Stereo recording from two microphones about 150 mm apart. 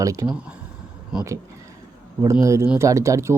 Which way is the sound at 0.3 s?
10° right (ahead or behind).